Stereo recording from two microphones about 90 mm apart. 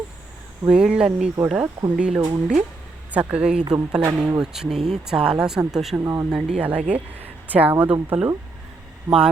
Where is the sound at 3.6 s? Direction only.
45° right (ahead or behind).